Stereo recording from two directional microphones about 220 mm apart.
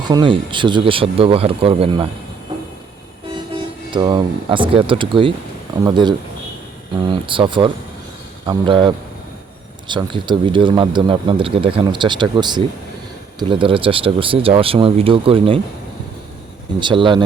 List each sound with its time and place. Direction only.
0.1 s speech: 20° right (ahead or behind)
3.9 s speech: 20° right (ahead or behind)
16.8 s speech: 20° right (ahead or behind)